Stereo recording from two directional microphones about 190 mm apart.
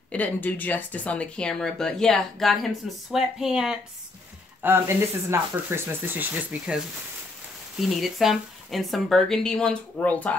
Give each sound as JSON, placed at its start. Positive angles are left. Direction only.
{"t": 0.1, "sound": "speech", "side_deg": 10}